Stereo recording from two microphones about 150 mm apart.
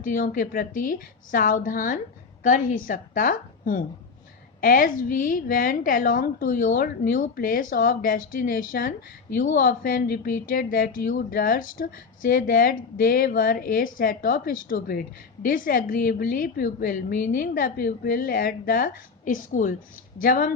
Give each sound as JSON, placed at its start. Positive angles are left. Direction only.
{"t": 0.0, "sound": "a woman's voice", "side_deg": 65}